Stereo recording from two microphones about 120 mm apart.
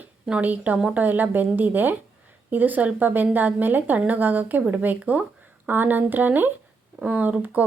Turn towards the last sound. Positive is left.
turn(degrees=-15)  # may be behind; listen again after turning